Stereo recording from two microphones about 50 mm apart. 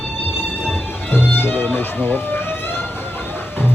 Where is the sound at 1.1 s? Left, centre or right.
Left.